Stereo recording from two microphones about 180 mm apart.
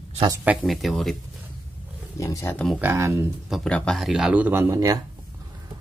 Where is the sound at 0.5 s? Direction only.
Centre (ahead or behind).